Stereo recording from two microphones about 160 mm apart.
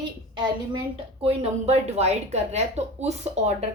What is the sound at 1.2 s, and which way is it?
Speech, 40° right (ahead or behind).